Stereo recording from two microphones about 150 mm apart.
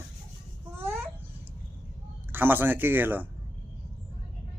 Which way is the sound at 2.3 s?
15° right (ahead or behind).